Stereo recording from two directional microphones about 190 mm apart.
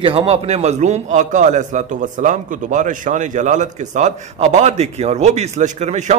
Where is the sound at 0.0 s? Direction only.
30° right (ahead or behind).